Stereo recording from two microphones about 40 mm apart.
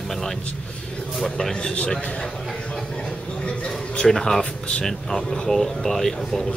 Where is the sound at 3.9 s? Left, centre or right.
Centre.